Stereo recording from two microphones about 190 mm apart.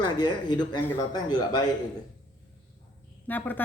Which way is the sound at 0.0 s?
20° left (ahead or behind).